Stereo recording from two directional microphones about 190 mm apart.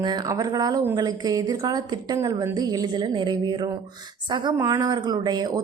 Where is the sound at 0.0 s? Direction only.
20° right (ahead or behind).